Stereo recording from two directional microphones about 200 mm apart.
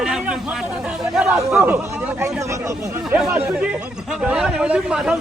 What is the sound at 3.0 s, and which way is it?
Speech, 5° right (ahead or behind).